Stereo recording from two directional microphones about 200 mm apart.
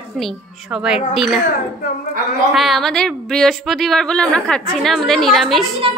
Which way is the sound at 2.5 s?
Centre (ahead or behind).